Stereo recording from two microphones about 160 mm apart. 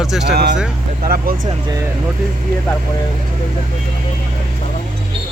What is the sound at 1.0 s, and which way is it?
Speech, 70° right (ahead or behind).